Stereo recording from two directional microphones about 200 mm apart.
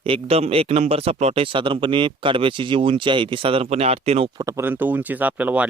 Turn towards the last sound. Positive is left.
turn(degrees=-10)  # may be behind; listen again after turning